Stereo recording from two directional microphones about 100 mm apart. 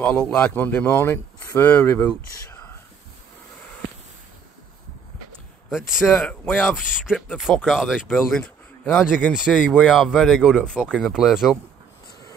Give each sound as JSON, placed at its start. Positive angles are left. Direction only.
{"t": 0.0, "sound": "speech", "side_deg": 15}
{"t": 5.7, "sound": "speech", "side_deg": -5}
{"t": 8.8, "sound": "speech", "side_deg": 15}
{"t": 9.4, "sound": "speech", "side_deg": 0}